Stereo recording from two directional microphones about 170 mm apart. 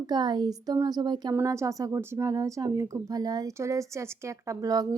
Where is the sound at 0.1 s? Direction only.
25° right (ahead or behind).